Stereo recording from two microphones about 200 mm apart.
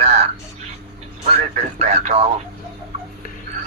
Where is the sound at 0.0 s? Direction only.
30° right (ahead or behind).